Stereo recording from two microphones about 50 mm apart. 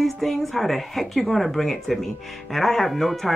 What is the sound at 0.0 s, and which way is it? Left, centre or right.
Speech, centre.